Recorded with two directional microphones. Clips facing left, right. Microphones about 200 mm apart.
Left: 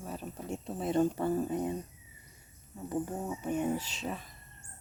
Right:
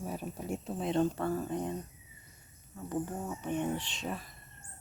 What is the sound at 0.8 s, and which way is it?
Speech, 10° left (ahead or behind).